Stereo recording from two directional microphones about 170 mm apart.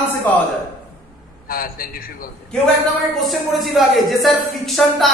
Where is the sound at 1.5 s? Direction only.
60° left (ahead or behind).